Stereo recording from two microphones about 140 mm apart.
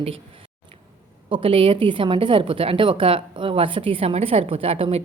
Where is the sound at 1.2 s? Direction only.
40° right (ahead or behind).